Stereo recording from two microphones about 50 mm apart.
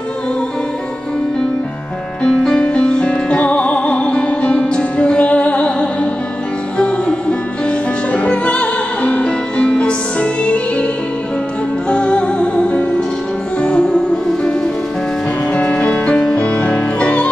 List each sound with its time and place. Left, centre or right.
2.2 s music: centre
11.9 s music: left
15.5 s music: left